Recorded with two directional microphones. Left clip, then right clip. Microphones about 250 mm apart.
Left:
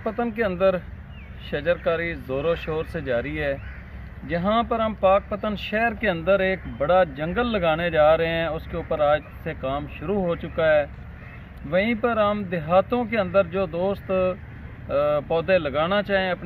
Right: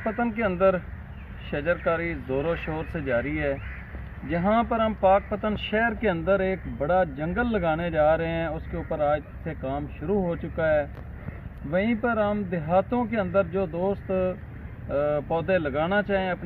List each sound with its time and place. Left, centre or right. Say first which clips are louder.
0.0 s a man's voice: left 2 dB; centre
2.2 s a man's voice: left 3 dB; centre
2.9 s speech: right 2 dB; left
4.3 s a man's voice: left 1 dB; left